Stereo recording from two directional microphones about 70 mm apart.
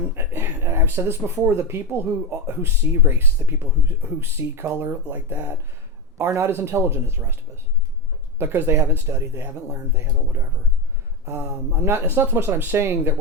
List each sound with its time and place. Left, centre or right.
0.2 s speech: right
8.4 s speech: right